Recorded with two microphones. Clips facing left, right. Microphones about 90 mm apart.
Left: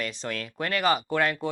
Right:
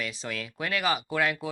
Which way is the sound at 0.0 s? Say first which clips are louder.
Left 2 dB; centre (ahead or behind).